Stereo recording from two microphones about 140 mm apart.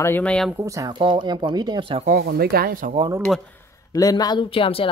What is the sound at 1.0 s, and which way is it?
Speech, 35° right (ahead or behind).